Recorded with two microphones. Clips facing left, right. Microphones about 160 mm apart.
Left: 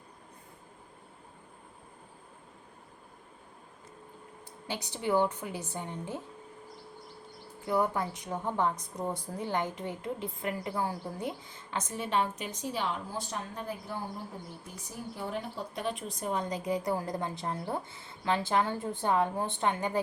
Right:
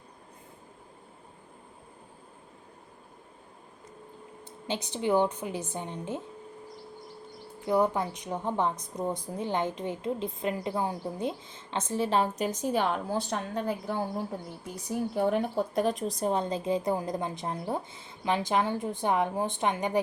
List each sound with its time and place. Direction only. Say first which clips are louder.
4.7 s a woman's voice: right 3 dB; 20° right (ahead or behind)
7.7 s a woman's voice: right 3 dB; 20° right (ahead or behind); by 14.0 s 75° right (ahead or behind)
15.1 s a woman's voice: right 10 dB; 65° right (ahead or behind); by 20.0 s 15° right (ahead or behind)